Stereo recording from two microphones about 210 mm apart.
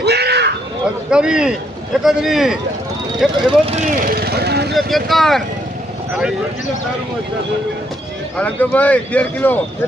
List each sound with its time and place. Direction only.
0.0 s a sound: 50° right (ahead or behind)
1.1 s a man's voice: 5° right (ahead or behind)
3.7 s speech: 35° right (ahead or behind)
4.7 s a man's voice: centre (ahead or behind)
8.4 s speech: 5° left (ahead or behind)